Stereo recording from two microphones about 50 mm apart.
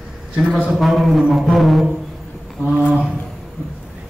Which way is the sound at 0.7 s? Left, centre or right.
Centre.